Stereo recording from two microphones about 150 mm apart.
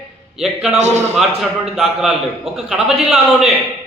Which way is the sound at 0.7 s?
50° right (ahead or behind).